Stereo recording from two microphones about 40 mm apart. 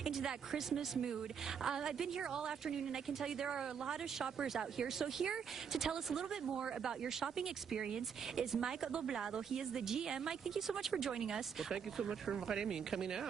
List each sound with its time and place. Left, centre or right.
0.0 s a woman's voice: centre